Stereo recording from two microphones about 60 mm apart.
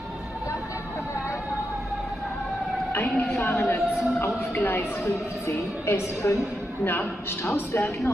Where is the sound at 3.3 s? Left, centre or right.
Left.